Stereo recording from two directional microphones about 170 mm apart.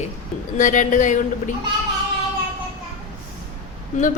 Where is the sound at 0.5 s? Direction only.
45° left (ahead or behind).